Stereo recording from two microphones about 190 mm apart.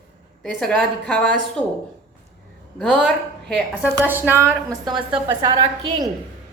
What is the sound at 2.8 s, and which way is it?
A woman's voice, centre (ahead or behind).